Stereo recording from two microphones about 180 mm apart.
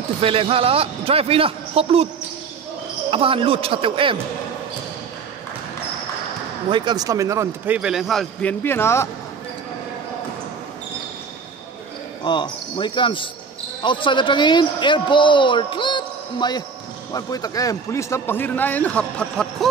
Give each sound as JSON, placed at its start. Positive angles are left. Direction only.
{"t": 0.2, "sound": "a man's voice", "side_deg": -30}
{"t": 3.1, "sound": "speech", "side_deg": -30}
{"t": 6.7, "sound": "speech", "side_deg": -25}
{"t": 12.3, "sound": "a man's voice", "side_deg": 25}